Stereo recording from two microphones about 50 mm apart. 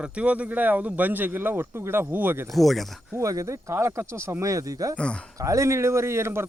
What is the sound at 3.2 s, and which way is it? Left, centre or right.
Speech, right.